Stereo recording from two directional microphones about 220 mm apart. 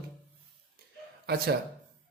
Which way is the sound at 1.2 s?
45° right (ahead or behind).